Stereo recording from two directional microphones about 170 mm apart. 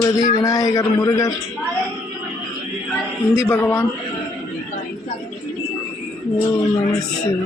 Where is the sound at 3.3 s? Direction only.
15° left (ahead or behind).